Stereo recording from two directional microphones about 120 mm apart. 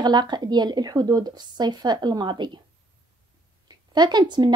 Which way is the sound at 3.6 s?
35° right (ahead or behind).